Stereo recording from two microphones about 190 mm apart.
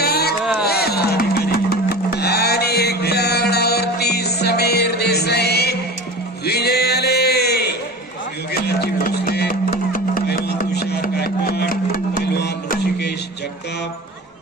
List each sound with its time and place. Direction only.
0.0 s music: 55° left (ahead or behind)